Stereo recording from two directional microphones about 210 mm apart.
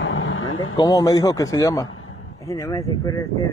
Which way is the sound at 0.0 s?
65° left (ahead or behind).